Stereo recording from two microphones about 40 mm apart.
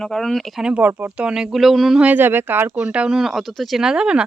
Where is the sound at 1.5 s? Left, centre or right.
Centre.